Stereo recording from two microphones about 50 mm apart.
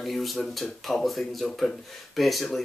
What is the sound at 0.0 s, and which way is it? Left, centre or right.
Speech, centre.